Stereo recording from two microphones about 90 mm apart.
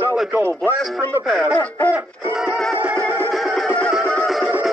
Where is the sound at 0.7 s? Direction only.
Centre (ahead or behind).